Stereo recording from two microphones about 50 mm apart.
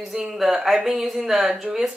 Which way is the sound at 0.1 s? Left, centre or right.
Centre.